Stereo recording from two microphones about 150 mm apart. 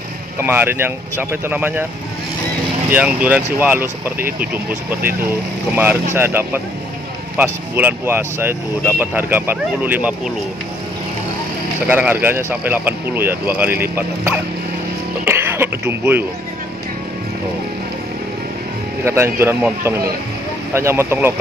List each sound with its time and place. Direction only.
0.4 s speech: 15° right (ahead or behind)
2.9 s speech: 10° right (ahead or behind)
11.9 s speech: 10° right (ahead or behind)
15.2 s throat clearing: 15° right (ahead or behind)
19.0 s speech: 15° right (ahead or behind)